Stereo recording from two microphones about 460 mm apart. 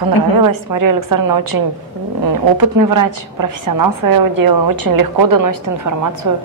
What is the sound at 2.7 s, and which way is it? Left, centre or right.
A woman's voice, right.